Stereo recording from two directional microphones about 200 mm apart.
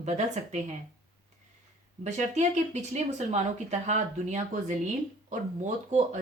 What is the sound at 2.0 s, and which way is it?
Speech, 35° right (ahead or behind).